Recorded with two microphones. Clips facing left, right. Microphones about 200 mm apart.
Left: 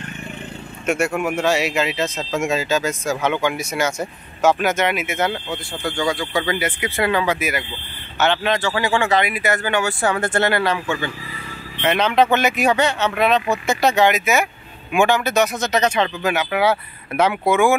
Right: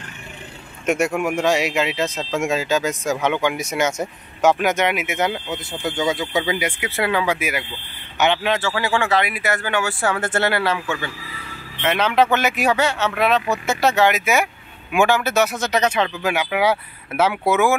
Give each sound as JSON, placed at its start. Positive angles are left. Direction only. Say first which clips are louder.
{"t": 0.8, "sound": "speech", "louder": "right 1 dB", "side_deg": -15}